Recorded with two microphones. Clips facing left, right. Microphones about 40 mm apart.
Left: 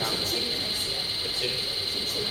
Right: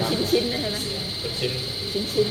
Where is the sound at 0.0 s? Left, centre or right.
Centre.